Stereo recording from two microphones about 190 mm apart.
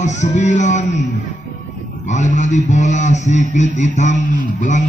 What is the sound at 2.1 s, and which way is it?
A man's voice, 40° left (ahead or behind).